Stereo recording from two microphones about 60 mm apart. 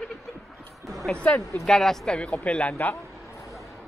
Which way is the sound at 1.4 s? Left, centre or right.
Left.